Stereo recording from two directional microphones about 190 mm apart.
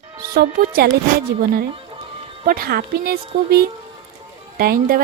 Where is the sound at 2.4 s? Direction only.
50° right (ahead or behind).